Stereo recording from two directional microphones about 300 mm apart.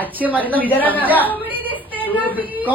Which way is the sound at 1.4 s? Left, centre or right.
Centre.